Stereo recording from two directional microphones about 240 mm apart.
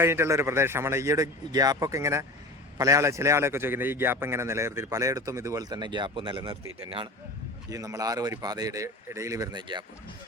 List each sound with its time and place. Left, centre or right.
0.0 s a man's voice: centre
7.7 s a man's voice: centre